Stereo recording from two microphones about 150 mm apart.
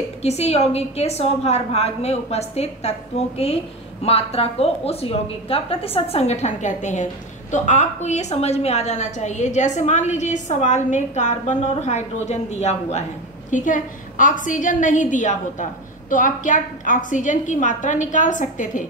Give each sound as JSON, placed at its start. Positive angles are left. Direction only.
{"t": 0.2, "sound": "a woman's voice", "side_deg": 45}
{"t": 13.5, "sound": "a woman's voice", "side_deg": 60}